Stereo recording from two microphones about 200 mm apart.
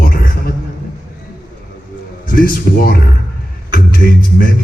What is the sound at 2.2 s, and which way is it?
Speech, 45° left (ahead or behind).